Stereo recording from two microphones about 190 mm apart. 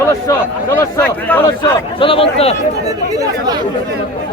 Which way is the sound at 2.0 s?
30° left (ahead or behind).